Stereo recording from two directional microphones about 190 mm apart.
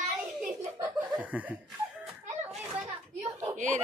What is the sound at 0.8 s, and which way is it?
Laughter, 10° right (ahead or behind).